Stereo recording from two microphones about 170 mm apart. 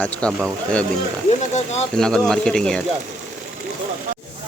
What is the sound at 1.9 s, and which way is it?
Speech, 5° left (ahead or behind).